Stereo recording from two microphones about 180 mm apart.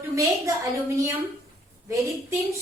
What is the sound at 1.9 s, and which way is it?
Speech, 15° right (ahead or behind).